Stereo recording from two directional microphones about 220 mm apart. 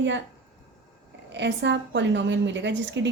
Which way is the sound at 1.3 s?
50° right (ahead or behind).